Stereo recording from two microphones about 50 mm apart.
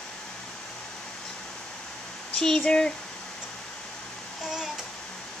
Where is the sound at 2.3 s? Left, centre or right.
Centre.